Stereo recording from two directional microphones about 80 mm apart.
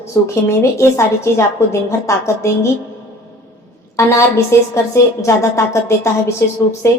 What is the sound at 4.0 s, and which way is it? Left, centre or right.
A woman's voice, left.